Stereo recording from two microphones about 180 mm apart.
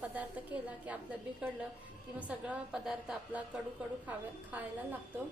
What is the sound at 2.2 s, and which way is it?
A woman's voice, 5° right (ahead or behind).